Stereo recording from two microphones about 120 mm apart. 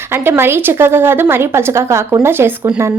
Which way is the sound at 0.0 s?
20° right (ahead or behind).